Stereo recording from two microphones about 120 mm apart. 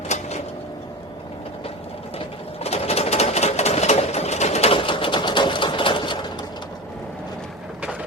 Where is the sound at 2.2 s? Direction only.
55° left (ahead or behind); by 6.4 s 40° left (ahead or behind).